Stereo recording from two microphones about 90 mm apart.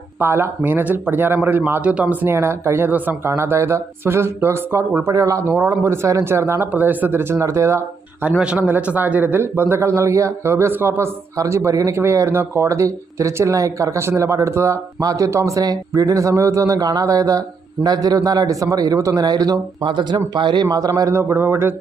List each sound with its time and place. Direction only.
0.2 s speech: 25° right (ahead or behind)
2.2 s speech: 30° right (ahead or behind)
8.3 s a man's voice: 10° right (ahead or behind); by 19.5 s 45° right (ahead or behind)
19.8 s a man's voice: 60° right (ahead or behind); by 21.8 s 25° right (ahead or behind)